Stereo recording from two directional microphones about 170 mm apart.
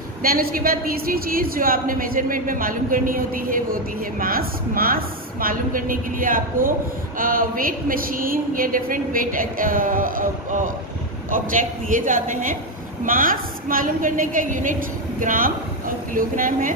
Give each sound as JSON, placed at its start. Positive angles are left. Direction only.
{"t": 0.2, "sound": "a woman's voice", "side_deg": -60}